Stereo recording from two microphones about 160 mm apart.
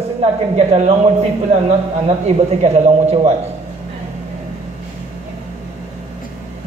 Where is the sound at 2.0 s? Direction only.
40° right (ahead or behind).